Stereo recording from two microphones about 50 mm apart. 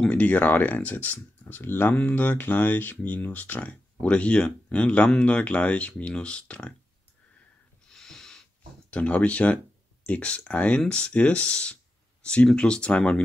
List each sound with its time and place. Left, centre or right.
0.1 s speech: left
1.6 s speech: left
2.0 s speech: left
7.9 s owl: centre
8.9 s speech: left